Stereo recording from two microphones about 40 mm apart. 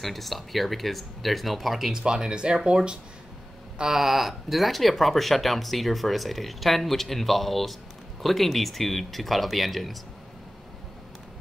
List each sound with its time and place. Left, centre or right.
0.0 s speech: centre
2.0 s speech: centre
3.9 s speech: centre